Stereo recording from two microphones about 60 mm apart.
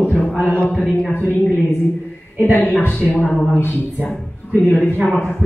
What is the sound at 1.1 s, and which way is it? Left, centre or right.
Speech, left.